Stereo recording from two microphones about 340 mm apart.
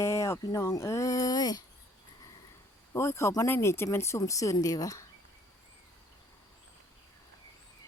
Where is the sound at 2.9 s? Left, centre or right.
Centre.